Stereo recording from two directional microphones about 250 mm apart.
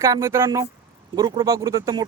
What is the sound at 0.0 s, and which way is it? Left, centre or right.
Speech, centre.